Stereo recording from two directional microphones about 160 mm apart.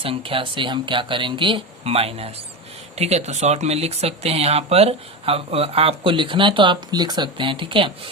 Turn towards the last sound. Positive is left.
turn(degrees=-30)  # may be behind; listen again after turning